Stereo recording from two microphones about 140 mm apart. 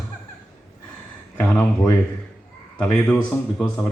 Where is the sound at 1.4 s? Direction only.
10° left (ahead or behind).